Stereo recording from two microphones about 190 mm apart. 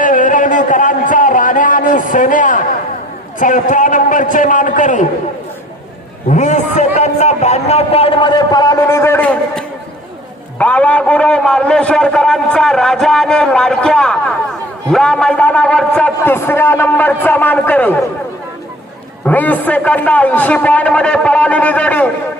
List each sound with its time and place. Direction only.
0.0 s a sound: 45° left (ahead or behind)
3.3 s a man's voice: 45° left (ahead or behind)
6.2 s a man's voice: 40° left (ahead or behind); by 17.9 s 10° left (ahead or behind)
19.2 s a man's voice: 10° left (ahead or behind)